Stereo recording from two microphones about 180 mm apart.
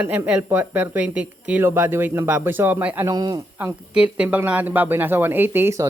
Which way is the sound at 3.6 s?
10° right (ahead or behind).